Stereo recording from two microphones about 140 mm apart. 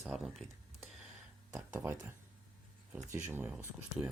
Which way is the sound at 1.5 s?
10° right (ahead or behind).